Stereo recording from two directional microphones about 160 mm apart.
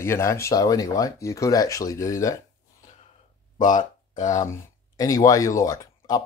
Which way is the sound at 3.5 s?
55° left (ahead or behind).